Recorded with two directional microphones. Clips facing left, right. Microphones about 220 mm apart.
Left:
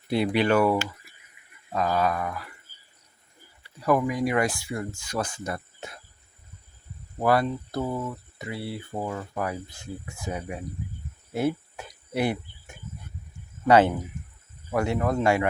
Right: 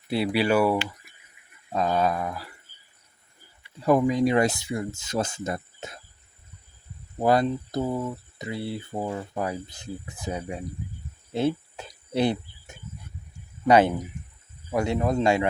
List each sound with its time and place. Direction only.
0.1 s a man's voice: 5° right (ahead or behind)
1.7 s speech: 25° right (ahead or behind)
3.8 s speech: 25° right (ahead or behind)
7.2 s speech: 20° right (ahead or behind)
11.3 s cricket: 25° right (ahead or behind)
13.7 s a man's voice: 15° right (ahead or behind)